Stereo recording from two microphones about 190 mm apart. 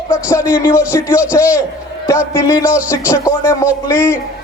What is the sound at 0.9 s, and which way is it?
A man's voice, 15° left (ahead or behind).